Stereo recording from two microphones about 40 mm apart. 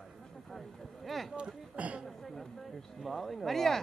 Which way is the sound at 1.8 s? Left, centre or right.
Right.